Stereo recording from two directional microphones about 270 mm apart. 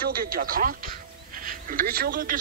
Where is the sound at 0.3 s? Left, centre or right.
Right.